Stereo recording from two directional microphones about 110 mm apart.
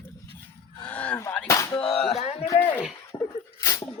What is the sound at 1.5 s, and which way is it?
Speech, 25° left (ahead or behind).